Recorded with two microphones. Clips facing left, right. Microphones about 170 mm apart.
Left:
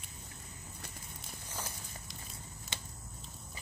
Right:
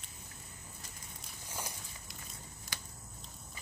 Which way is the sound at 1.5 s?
10° right (ahead or behind).